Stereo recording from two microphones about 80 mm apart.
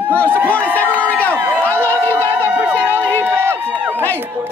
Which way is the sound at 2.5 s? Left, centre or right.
Centre.